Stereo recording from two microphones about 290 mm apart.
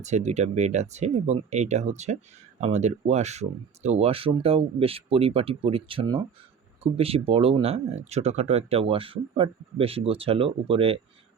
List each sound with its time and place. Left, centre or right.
0.0 s speech: right